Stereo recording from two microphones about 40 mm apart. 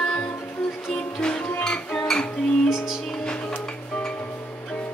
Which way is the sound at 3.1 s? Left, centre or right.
Centre.